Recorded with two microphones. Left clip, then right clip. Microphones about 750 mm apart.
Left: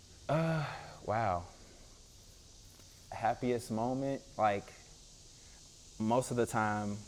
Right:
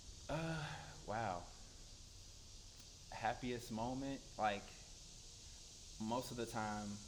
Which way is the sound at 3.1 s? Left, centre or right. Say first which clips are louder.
Left 9 dB; left.